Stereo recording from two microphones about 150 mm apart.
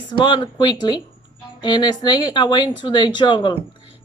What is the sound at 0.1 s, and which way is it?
A woman's voice, 30° left (ahead or behind).